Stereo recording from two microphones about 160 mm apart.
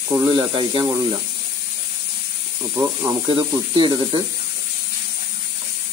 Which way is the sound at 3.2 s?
30° right (ahead or behind).